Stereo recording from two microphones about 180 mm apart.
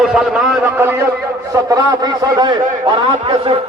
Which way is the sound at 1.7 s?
20° right (ahead or behind).